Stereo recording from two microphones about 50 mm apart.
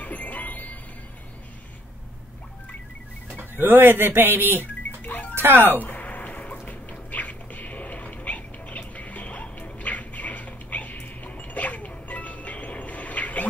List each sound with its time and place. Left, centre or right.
0.0 s music: left
3.3 s speech: right
5.0 s music: left
5.3 s speech: right
5.8 s a sound: left